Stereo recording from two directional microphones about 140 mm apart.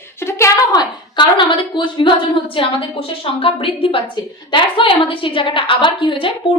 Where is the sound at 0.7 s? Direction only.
35° left (ahead or behind).